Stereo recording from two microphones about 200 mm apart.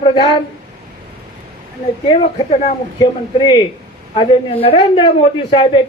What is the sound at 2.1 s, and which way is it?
Speech, 25° left (ahead or behind).